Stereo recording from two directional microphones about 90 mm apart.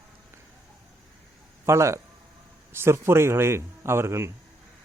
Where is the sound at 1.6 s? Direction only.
30° right (ahead or behind).